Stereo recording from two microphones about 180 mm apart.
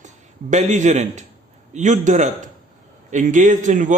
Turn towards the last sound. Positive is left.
turn(degrees=-45)  # may be behind; listen again after turning